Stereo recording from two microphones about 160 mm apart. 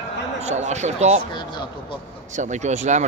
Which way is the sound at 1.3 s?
30° left (ahead or behind).